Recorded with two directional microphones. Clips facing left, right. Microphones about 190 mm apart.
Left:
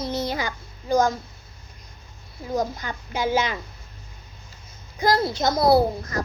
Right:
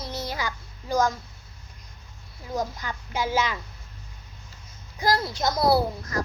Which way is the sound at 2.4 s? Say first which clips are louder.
Left 4 dB; 20° left (ahead or behind).